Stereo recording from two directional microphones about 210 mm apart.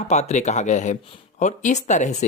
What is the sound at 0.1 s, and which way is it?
Speech, 35° left (ahead or behind).